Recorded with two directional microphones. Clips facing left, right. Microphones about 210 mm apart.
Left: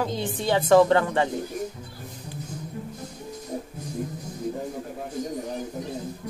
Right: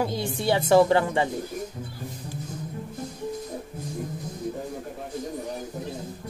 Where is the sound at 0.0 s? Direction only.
10° right (ahead or behind).